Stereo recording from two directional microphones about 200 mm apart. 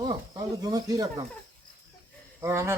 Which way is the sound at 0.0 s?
20° right (ahead or behind).